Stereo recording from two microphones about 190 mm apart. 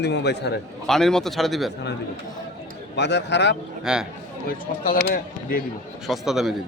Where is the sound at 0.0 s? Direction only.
65° left (ahead or behind).